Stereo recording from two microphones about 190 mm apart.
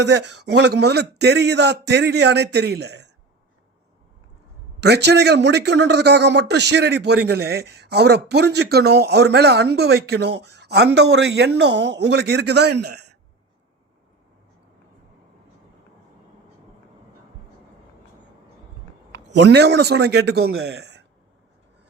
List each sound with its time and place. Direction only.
0.0 s a man's voice: 65° right (ahead or behind)
4.8 s a man's voice: 60° right (ahead or behind)
19.4 s a man's voice: 65° right (ahead or behind)